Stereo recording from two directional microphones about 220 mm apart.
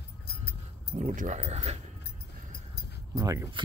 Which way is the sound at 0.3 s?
45° left (ahead or behind).